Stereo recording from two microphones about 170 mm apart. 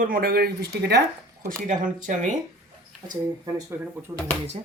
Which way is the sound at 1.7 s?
50° right (ahead or behind).